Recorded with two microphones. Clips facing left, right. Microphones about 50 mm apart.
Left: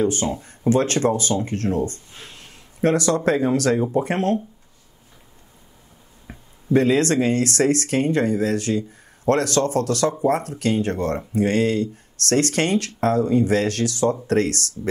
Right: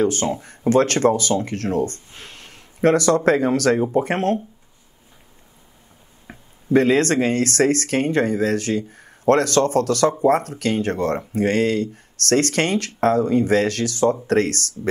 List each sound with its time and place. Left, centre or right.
0.0 s speech: right
6.3 s a sound: right
6.7 s speech: right